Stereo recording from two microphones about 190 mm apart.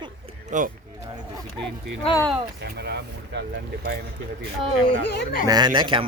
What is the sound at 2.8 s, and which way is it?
Vehicle, 60° right (ahead or behind).